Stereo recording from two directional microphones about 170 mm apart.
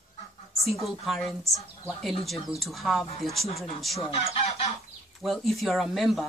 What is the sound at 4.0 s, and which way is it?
Chicken, 40° left (ahead or behind).